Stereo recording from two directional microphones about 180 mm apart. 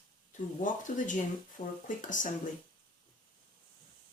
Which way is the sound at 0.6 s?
45° left (ahead or behind).